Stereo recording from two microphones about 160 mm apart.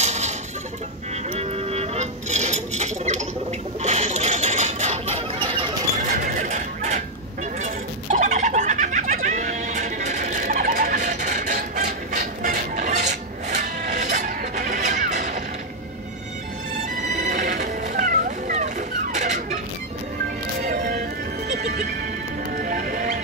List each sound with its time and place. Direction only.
0.0 s chicken: 45° right (ahead or behind)
1.4 s music: 40° right (ahead or behind)
3.8 s a sound: 45° right (ahead or behind)
5.9 s a sound: 50° right (ahead or behind)
17.2 s music: 50° right (ahead or behind)
20.6 s music: 60° right (ahead or behind)